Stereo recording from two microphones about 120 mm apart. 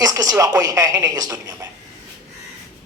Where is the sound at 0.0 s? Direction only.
30° right (ahead or behind).